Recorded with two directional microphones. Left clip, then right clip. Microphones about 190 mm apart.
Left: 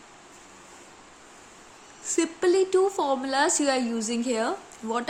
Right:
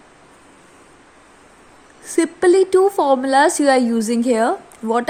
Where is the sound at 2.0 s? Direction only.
35° right (ahead or behind).